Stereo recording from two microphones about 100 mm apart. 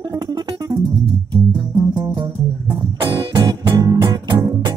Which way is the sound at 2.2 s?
55° right (ahead or behind).